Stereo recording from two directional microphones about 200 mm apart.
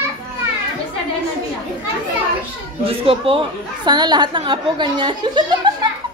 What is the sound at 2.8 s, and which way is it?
A woman's voice, 25° right (ahead or behind).